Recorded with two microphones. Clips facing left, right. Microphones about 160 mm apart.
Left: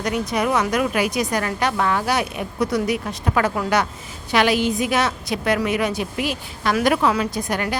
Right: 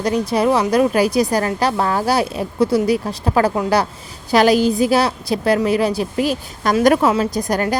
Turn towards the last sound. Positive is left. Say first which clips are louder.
# right 5 dB
turn(degrees=-35)  # may be behind; listen again after turning